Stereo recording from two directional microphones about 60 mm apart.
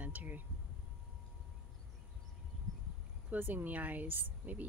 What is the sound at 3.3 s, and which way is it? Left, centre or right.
Speech, right.